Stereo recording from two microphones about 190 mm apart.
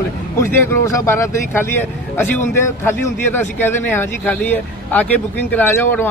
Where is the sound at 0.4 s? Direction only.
15° left (ahead or behind).